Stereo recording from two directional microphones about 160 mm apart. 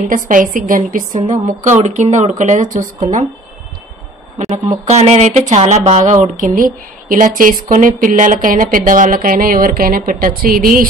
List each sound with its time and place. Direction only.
0.1 s speech: 55° right (ahead or behind)
4.6 s speech: 45° right (ahead or behind); by 10.9 s 65° right (ahead or behind)